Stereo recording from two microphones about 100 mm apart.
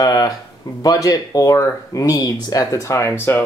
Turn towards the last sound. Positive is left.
turn(degrees=25)  # may be behind; listen again after turning